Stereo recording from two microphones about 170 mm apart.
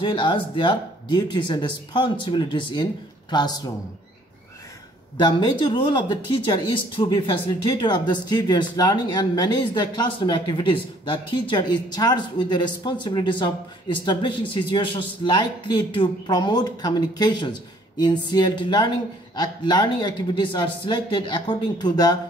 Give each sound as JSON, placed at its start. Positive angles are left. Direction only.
{"t": 0.0, "sound": "speech", "side_deg": 30}
{"t": 5.2, "sound": "speech", "side_deg": 25}